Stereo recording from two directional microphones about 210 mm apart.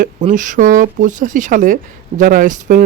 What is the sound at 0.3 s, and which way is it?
Speech, 40° right (ahead or behind).